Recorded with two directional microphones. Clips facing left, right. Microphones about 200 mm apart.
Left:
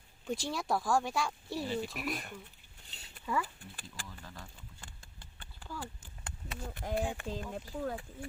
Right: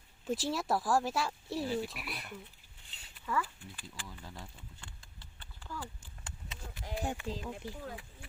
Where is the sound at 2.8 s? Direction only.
40° left (ahead or behind).